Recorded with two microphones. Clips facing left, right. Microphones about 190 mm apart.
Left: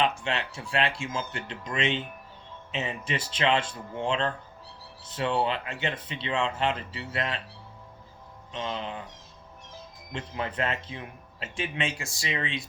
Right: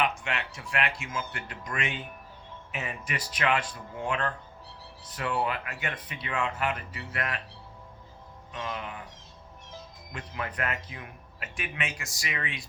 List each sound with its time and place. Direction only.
0.0 s a man's voice: 30° left (ahead or behind)
8.5 s a man's voice: 25° left (ahead or behind)
10.1 s a man's voice: 25° left (ahead or behind)